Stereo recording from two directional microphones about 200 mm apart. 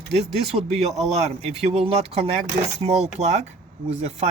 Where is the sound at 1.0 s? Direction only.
35° right (ahead or behind).